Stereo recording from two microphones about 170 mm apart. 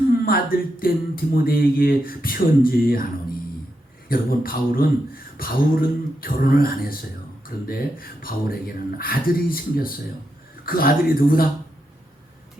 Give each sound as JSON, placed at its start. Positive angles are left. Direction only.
{"t": 0.1, "sound": "speech", "side_deg": 60}
{"t": 4.1, "sound": "speech", "side_deg": 60}